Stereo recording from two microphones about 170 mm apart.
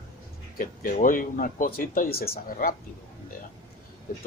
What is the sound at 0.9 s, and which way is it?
Speech, 55° left (ahead or behind).